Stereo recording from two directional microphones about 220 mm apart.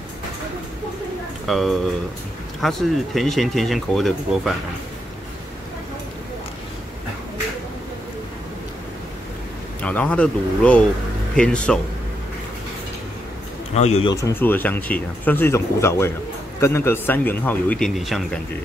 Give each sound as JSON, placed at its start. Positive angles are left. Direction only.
{"t": 1.5, "sound": "speech", "side_deg": 0}
{"t": 9.8, "sound": "speech", "side_deg": 5}
{"t": 13.7, "sound": "speech", "side_deg": 30}
{"t": 14.1, "sound": "speech", "side_deg": 10}